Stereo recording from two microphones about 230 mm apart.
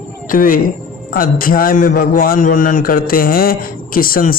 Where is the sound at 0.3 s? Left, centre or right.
Left.